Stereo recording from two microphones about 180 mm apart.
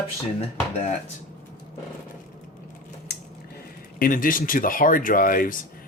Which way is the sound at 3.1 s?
70° left (ahead or behind).